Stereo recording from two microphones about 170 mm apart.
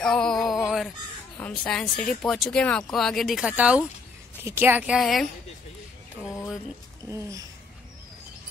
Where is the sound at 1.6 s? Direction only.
5° left (ahead or behind).